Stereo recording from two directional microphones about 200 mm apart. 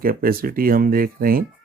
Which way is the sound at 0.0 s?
45° right (ahead or behind).